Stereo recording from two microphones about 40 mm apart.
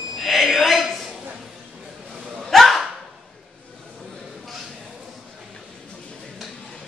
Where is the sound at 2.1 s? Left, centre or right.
Centre.